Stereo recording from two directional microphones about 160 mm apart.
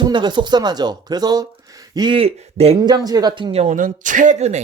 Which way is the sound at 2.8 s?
25° right (ahead or behind).